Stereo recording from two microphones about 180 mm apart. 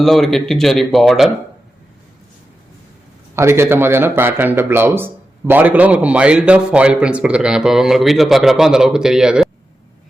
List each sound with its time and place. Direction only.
0.0 s speech: centre (ahead or behind)
3.3 s a man's voice: 15° right (ahead or behind)